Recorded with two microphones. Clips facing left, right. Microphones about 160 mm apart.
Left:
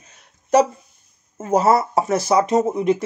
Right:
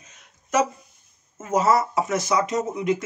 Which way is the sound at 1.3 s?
35° left (ahead or behind).